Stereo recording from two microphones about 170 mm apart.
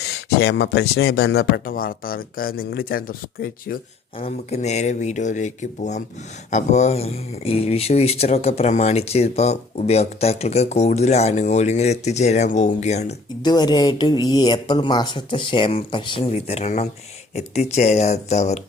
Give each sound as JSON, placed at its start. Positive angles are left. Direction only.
{"t": 0.0, "sound": "speech", "side_deg": 75}
{"t": 4.2, "sound": "speech", "side_deg": 40}
{"t": 13.4, "sound": "speech", "side_deg": 25}